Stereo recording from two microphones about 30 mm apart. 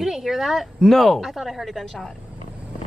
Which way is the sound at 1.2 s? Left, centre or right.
Centre.